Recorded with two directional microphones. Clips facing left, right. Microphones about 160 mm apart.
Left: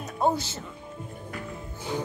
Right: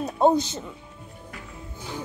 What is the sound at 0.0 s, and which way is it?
Speech, 20° right (ahead or behind).